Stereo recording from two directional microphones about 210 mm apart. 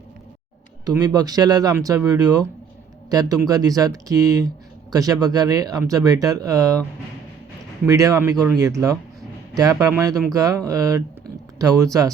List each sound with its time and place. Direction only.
0.9 s speech: 20° right (ahead or behind)
7.9 s speech: 15° right (ahead or behind)